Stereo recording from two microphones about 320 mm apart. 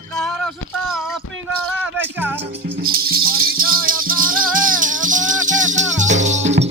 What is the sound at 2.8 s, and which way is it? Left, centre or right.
Music, right.